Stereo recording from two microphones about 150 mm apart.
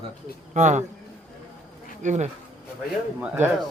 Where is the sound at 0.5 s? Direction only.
55° right (ahead or behind).